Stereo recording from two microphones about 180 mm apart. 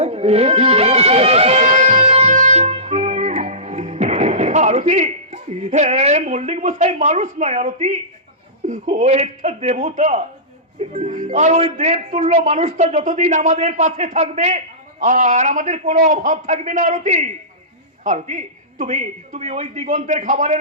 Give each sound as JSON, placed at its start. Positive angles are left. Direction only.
{"t": 0.0, "sound": "music", "side_deg": -35}
{"t": 8.6, "sound": "a man's voice", "side_deg": -45}